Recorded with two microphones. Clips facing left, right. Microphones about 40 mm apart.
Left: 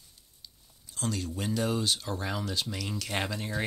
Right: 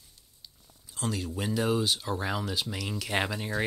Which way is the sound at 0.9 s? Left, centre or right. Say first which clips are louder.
Right 1 dB; centre.